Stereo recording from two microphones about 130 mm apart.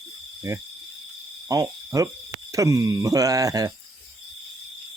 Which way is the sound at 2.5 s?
25° right (ahead or behind).